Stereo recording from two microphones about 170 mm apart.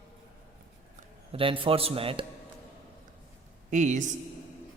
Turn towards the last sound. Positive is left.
turn(degrees=-45)  # may be behind; listen again after turning